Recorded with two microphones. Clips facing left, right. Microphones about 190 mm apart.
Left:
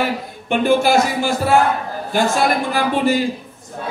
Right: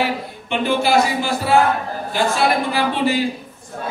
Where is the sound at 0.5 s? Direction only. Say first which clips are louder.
Left 3 dB; 45° left (ahead or behind).